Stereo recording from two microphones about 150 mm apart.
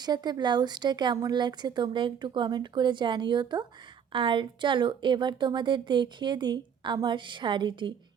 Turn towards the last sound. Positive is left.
turn(degrees=-30)  # may be behind; listen again after turning